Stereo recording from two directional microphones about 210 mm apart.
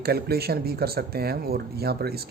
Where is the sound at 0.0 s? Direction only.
50° right (ahead or behind).